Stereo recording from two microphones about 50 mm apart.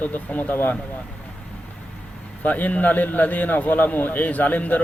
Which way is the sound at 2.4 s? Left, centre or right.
Left.